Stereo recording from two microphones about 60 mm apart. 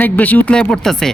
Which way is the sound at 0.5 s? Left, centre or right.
Centre.